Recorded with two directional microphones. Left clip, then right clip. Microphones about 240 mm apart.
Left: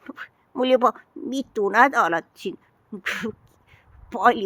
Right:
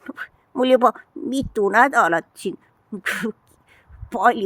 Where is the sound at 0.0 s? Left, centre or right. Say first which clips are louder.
Right 4 dB; right.